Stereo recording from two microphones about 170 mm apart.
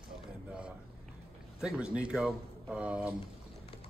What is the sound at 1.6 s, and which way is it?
Speech, 5° right (ahead or behind).